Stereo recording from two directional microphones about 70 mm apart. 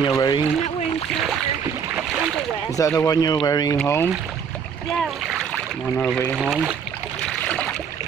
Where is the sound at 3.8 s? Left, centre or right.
Left.